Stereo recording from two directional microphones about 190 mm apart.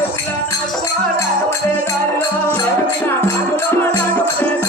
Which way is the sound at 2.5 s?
10° left (ahead or behind).